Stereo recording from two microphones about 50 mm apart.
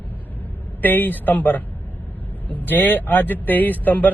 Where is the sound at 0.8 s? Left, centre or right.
Left.